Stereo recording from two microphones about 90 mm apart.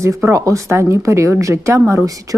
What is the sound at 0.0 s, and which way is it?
A woman's voice, 30° right (ahead or behind).